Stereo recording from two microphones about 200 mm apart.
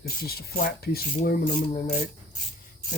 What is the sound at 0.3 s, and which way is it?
Speech, 50° left (ahead or behind).